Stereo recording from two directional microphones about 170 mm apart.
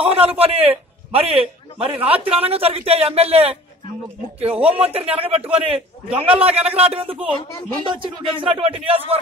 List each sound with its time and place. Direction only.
0.0 s a man's voice: 35° right (ahead or behind)